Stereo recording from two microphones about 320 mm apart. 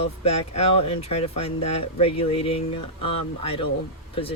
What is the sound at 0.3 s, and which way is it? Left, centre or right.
Speech, centre.